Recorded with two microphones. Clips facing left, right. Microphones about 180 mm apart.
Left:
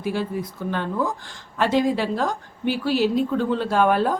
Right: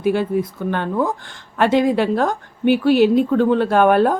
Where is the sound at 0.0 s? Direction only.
60° right (ahead or behind).